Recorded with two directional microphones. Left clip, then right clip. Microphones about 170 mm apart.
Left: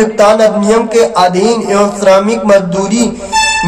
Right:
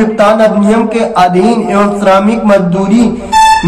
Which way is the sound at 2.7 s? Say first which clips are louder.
Right 2 dB; 45° left (ahead or behind).